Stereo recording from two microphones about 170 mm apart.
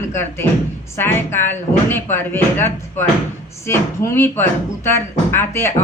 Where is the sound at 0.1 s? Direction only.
15° left (ahead or behind).